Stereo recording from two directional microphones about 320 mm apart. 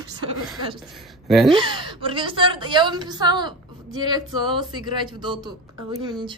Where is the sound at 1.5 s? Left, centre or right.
Centre.